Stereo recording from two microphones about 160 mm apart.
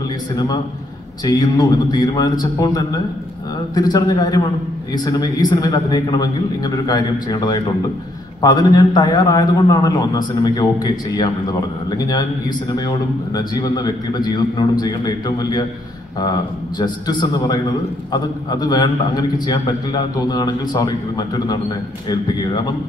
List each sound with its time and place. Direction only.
1.2 s a man's voice: 25° left (ahead or behind)